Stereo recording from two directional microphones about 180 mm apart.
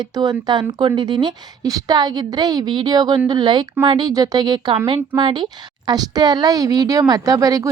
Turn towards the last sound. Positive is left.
turn(degrees=-20)  # may be behind; listen again after turning